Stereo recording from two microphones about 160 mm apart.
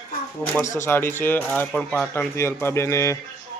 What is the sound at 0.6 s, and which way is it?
Speech, 15° left (ahead or behind).